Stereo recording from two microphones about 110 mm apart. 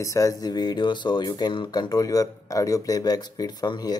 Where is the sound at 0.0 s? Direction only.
30° left (ahead or behind).